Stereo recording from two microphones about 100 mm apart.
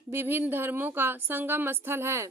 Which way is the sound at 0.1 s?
20° right (ahead or behind).